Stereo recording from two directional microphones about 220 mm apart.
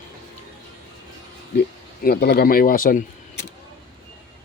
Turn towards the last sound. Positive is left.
turn(degrees=40)  # may be behind; listen again after turning